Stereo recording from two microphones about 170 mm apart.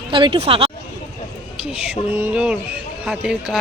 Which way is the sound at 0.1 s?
30° right (ahead or behind).